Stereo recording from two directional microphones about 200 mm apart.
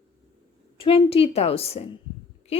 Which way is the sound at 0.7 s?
25° left (ahead or behind).